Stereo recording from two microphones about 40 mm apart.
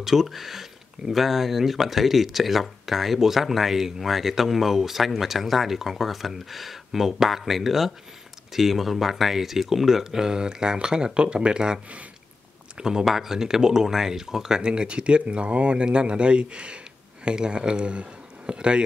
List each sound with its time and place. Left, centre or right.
0.0 s speech: centre; by 18.9 s right